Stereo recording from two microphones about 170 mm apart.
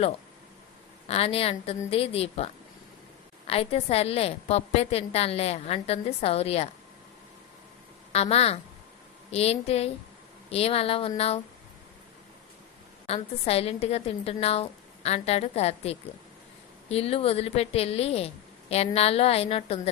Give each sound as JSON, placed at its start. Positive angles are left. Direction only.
{"t": 1.0, "sound": "a woman's voice", "side_deg": 35}
{"t": 8.1, "sound": "a woman's voice", "side_deg": 40}
{"t": 13.1, "sound": "a woman's voice", "side_deg": 35}